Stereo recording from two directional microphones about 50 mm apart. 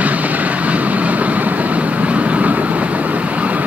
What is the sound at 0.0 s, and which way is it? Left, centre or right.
Vehicle, right.